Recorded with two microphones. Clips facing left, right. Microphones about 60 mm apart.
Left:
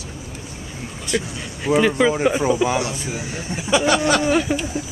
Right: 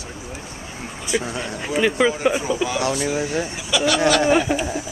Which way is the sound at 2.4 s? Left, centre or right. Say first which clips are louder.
Left 4 dB; left.